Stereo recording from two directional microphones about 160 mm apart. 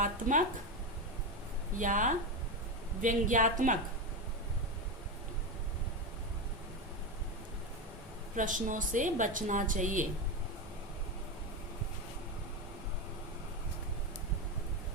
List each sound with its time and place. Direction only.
0.0 s speech: 55° right (ahead or behind)
1.8 s a woman's voice: 55° right (ahead or behind)
8.4 s a woman's voice: 55° right (ahead or behind)